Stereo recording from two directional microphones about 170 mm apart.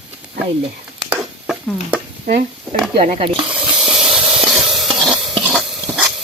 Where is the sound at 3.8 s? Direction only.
Centre (ahead or behind).